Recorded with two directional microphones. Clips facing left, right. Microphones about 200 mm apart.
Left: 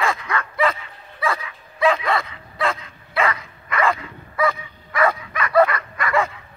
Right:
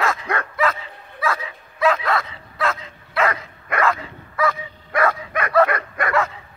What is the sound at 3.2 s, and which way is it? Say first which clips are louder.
Dog: right 1 dB; 55° right (ahead or behind).